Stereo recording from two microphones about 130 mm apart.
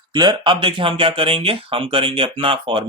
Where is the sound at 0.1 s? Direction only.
40° right (ahead or behind).